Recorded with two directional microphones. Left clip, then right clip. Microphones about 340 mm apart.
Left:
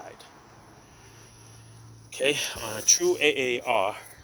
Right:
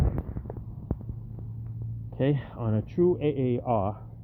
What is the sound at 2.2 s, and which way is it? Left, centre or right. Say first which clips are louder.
Speech: left 4 dB; centre.